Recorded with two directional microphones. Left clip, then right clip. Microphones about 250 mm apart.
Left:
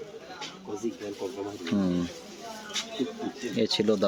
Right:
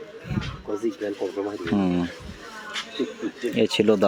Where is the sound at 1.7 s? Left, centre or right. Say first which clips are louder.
Right 4 dB; centre.